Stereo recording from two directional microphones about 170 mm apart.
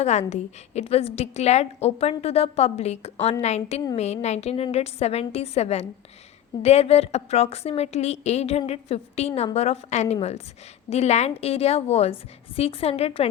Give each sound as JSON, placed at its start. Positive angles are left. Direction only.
{"t": 0.0, "sound": "a woman's voice", "side_deg": 40}